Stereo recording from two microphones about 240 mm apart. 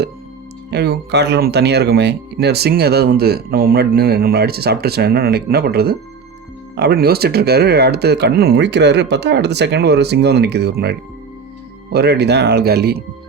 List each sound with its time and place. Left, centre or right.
0.7 s speech: right